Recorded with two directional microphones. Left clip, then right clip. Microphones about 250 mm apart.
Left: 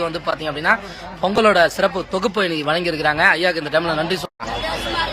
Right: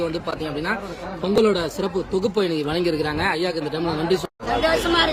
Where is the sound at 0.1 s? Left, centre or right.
Centre.